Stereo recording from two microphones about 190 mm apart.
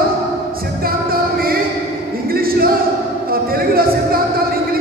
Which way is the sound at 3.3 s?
50° right (ahead or behind).